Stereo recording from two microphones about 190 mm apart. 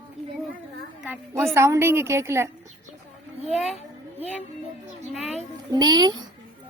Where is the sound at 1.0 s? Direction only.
10° right (ahead or behind).